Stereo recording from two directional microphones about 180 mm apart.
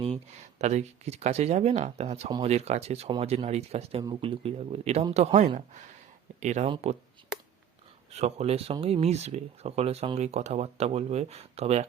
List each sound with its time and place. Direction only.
0.6 s speech: 40° right (ahead or behind)
8.1 s speech: 35° right (ahead or behind)